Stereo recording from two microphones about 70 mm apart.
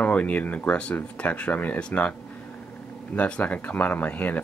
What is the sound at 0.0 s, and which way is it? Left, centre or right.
Speech, centre.